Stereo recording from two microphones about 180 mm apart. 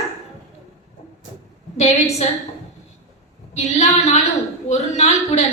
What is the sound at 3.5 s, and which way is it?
A woman's voice, 35° left (ahead or behind).